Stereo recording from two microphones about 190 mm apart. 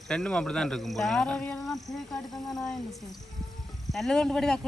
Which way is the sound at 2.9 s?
20° left (ahead or behind).